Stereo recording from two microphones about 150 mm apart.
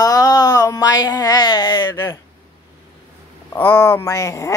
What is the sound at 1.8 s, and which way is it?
Speech, 15° left (ahead or behind).